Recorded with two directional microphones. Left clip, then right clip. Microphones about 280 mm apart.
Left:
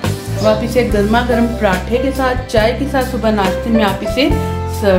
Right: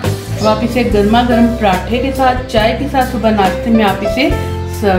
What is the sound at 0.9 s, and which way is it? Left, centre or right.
A woman's voice, left.